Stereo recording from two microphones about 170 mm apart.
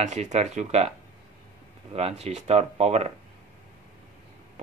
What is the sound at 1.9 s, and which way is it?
Speech, 35° right (ahead or behind).